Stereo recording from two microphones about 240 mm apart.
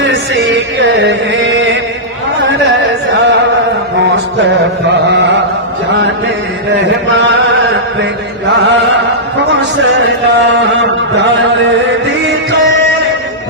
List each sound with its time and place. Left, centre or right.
0.0 s chant: right
2.4 s a sound: right
6.9 s chant: right
8.6 s mantra: right
9.5 s chant: right